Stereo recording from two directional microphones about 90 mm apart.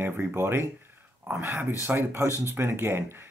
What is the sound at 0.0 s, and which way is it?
Speech, 25° right (ahead or behind).